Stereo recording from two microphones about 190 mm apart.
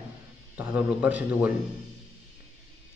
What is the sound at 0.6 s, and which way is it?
Speech, 10° right (ahead or behind).